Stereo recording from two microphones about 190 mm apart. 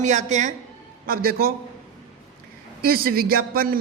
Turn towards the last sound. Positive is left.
turn(degrees=-50)  # may be behind; listen again after turning